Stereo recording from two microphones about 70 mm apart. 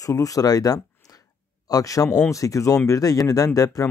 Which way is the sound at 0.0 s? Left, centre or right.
Left.